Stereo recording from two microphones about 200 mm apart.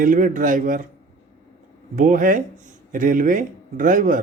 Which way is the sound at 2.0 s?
40° right (ahead or behind).